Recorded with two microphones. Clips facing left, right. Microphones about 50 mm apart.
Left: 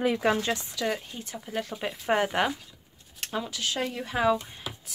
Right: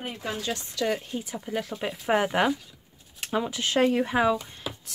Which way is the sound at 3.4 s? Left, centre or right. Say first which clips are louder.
Right 3 dB; right.